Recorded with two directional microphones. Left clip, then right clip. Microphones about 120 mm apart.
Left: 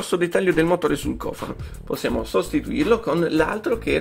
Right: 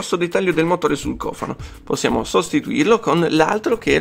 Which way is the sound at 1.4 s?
40° right (ahead or behind).